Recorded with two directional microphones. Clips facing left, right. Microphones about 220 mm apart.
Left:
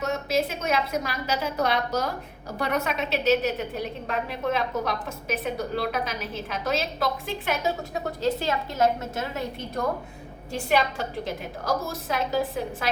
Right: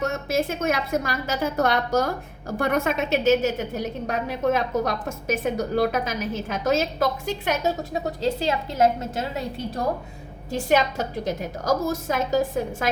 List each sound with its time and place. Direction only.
0.0 s a woman's voice: 50° right (ahead or behind)
8.8 s a woman's voice: 30° right (ahead or behind)
10.5 s a woman's voice: 40° right (ahead or behind)